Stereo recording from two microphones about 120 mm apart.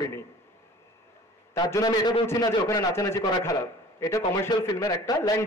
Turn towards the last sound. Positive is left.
turn(degrees=20)  # may be behind; listen again after turning